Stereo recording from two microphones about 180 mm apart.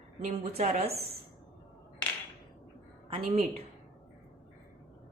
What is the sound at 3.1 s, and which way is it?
Speech, 30° right (ahead or behind).